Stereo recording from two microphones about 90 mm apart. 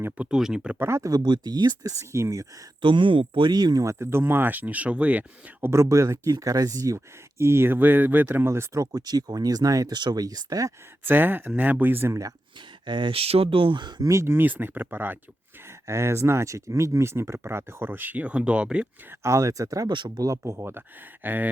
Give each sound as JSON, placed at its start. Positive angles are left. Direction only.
{"t": 0.3, "sound": "speech", "side_deg": -5}
{"t": 0.8, "sound": "speech", "side_deg": -30}
{"t": 1.1, "sound": "speech", "side_deg": -50}
{"t": 2.8, "sound": "speech", "side_deg": -70}
{"t": 3.8, "sound": "speech", "side_deg": -30}
{"t": 5.7, "sound": "speech", "side_deg": -35}
{"t": 11.0, "sound": "speech", "side_deg": -20}
{"t": 12.8, "sound": "speech", "side_deg": -60}
{"t": 14.0, "sound": "speech", "side_deg": -35}
{"t": 19.2, "sound": "speech", "side_deg": -35}
{"t": 19.9, "sound": "speech", "side_deg": -60}
{"t": 20.2, "sound": "speech", "side_deg": -35}